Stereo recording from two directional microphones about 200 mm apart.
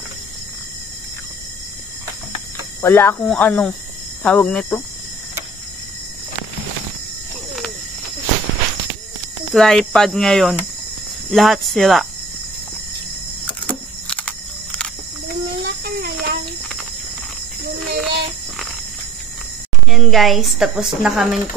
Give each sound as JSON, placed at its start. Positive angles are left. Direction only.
{"t": 2.8, "sound": "speech", "side_deg": 10}
{"t": 9.5, "sound": "speech", "side_deg": 0}
{"t": 13.5, "sound": "a sound", "side_deg": 5}
{"t": 15.8, "sound": "a sound", "side_deg": -45}
{"t": 17.6, "sound": "child singing", "side_deg": -55}
{"t": 19.9, "sound": "speech", "side_deg": 0}